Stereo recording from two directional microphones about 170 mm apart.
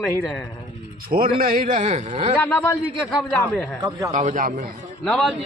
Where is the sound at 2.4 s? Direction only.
10° left (ahead or behind).